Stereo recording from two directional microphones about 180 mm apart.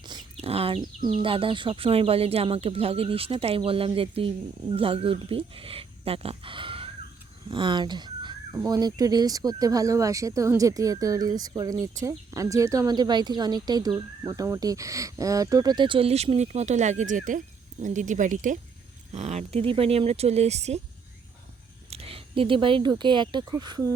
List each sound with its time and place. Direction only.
0.0 s bird: 25° right (ahead or behind)
0.3 s chicken: 35° right (ahead or behind)
1.1 s speech: 30° right (ahead or behind)
21.8 s speech: 35° right (ahead or behind)